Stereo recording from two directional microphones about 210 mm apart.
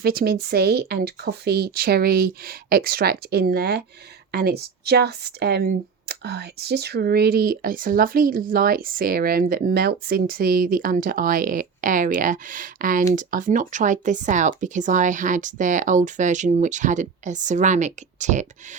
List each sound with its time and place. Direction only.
0.0 s speech: 45° right (ahead or behind)